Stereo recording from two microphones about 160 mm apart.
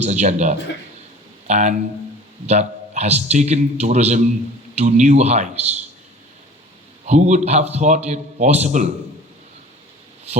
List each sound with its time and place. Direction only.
0.0 s a man's voice: 45° right (ahead or behind)
7.1 s a man's voice: 45° right (ahead or behind)